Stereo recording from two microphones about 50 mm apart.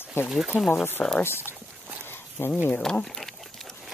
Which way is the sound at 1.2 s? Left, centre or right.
Left.